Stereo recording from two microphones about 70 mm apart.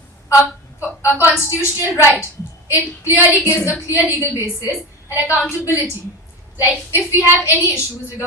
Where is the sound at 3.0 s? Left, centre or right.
Left.